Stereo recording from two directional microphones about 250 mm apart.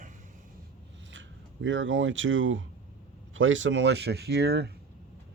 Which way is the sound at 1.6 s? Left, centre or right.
Right.